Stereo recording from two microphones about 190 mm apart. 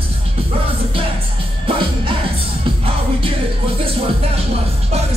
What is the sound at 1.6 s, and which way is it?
Music, 25° right (ahead or behind).